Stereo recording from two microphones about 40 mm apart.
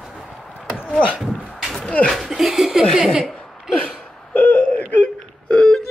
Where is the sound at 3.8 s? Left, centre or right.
Left.